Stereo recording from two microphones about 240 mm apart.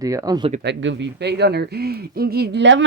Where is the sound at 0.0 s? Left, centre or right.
Centre.